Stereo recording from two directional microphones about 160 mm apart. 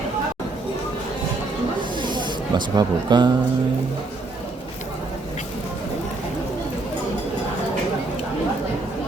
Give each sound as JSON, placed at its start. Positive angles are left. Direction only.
{"t": 2.0, "sound": "snake", "side_deg": -30}